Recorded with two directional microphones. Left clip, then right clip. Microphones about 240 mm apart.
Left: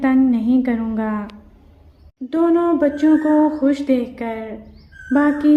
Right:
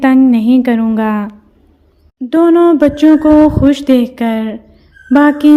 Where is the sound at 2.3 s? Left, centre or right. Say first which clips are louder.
Right 8 dB; right.